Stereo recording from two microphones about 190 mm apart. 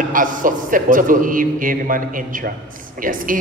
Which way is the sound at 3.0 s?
45° right (ahead or behind).